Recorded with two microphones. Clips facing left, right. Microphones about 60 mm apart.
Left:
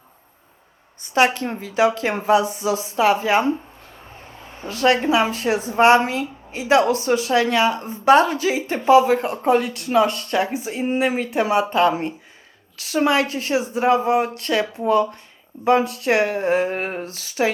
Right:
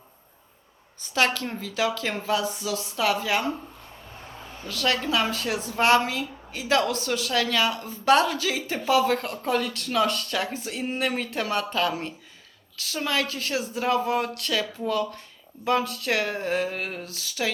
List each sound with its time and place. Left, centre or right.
1.1 s a woman's voice: left
4.5 s a woman's voice: left
9.0 s speech: centre
9.3 s a woman's voice: left